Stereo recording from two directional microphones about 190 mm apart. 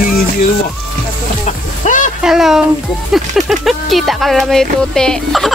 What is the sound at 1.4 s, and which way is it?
Music, 40° left (ahead or behind).